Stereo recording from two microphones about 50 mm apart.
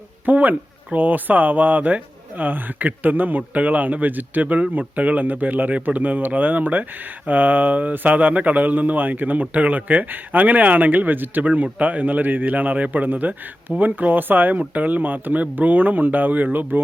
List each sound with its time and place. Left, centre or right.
0.3 s speech: right